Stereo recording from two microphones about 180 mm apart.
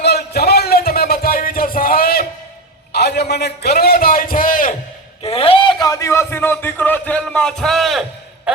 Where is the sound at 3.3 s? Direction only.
65° left (ahead or behind); by 4.7 s 50° left (ahead or behind).